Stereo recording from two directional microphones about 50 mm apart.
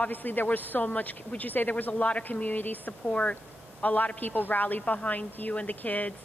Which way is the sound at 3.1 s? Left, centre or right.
Left.